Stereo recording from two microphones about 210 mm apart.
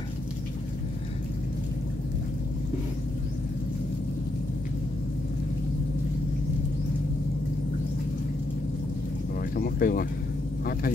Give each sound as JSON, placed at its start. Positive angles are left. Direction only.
{"t": 9.6, "sound": "vehicle", "side_deg": 40}